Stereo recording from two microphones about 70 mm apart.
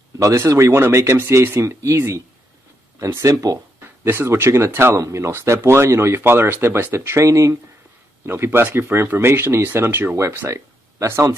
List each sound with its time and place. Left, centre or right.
0.2 s speech: right
3.8 s speech: right
8.3 s speech: right